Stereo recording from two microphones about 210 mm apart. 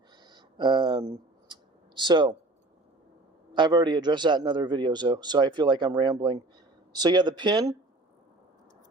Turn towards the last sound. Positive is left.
turn(degrees=-20)  # may be behind; listen again after turning